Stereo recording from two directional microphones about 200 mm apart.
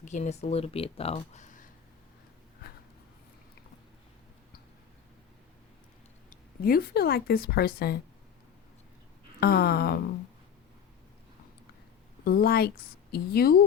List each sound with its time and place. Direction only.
0.0 s speech: 35° left (ahead or behind)
6.3 s speech: 45° left (ahead or behind)
9.4 s speech: 55° left (ahead or behind)
12.2 s speech: 50° left (ahead or behind)